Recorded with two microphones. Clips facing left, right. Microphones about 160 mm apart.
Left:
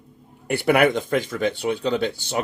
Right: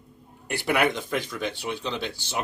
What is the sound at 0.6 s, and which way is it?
Speech, 60° left (ahead or behind).